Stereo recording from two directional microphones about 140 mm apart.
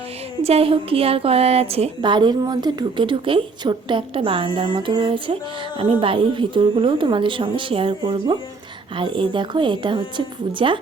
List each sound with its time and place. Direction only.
0.4 s speech: 45° right (ahead or behind)